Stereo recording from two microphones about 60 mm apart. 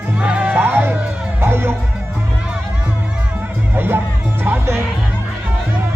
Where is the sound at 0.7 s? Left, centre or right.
Right.